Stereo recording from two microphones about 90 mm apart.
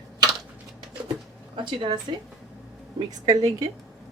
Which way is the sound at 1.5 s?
60° right (ahead or behind).